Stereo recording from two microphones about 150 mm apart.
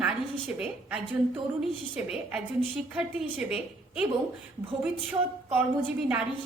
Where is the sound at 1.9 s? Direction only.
5° right (ahead or behind).